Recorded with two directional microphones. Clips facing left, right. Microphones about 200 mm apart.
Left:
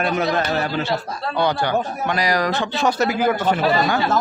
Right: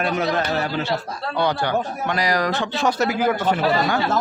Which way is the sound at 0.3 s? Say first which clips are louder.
Left 1 dB; 50° left (ahead or behind).